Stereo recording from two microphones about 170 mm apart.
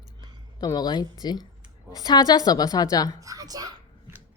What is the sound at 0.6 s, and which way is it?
Speech, 25° left (ahead or behind).